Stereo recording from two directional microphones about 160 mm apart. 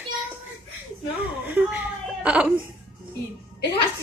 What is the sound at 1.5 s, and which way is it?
Hiccup, 10° right (ahead or behind).